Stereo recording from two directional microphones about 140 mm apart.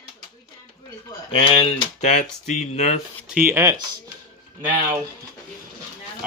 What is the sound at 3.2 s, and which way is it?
Speech, 10° right (ahead or behind).